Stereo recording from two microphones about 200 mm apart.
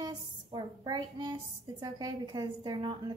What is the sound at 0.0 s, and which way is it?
A woman's voice, 20° right (ahead or behind).